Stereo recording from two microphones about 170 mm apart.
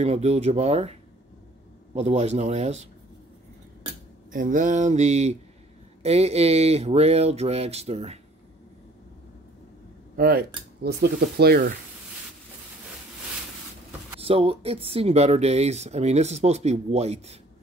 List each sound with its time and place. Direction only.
0.0 s speech: 40° right (ahead or behind)
2.0 s speech: 40° right (ahead or behind)
4.3 s speech: 50° right (ahead or behind)
10.1 s speech: 60° right (ahead or behind)
14.2 s speech: 35° right (ahead or behind)